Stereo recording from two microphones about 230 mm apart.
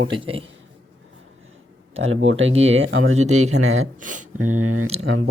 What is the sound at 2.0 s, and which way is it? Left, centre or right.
Speech, right.